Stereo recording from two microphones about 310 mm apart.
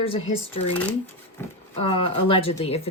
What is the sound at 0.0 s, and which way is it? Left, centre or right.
Speech, centre.